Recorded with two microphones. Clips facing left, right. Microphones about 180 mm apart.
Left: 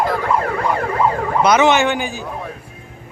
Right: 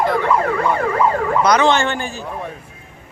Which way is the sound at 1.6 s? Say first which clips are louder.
Left 2 dB; 15° left (ahead or behind).